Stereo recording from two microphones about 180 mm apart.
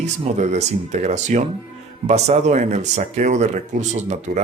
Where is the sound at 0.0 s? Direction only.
40° right (ahead or behind).